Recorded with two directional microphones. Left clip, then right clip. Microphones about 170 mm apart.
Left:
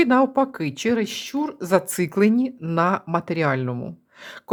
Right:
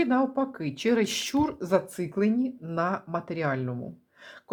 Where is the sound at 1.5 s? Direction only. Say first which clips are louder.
Left 9 dB; 15° left (ahead or behind).